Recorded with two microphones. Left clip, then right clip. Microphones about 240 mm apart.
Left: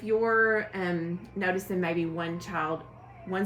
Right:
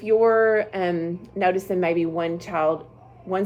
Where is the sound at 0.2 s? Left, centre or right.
Right.